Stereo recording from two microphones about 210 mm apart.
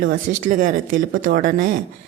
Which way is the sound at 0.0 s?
40° right (ahead or behind).